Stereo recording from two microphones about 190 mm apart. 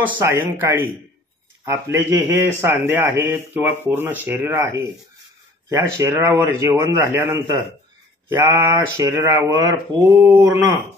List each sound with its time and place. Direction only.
0.0 s a man's voice: 10° right (ahead or behind)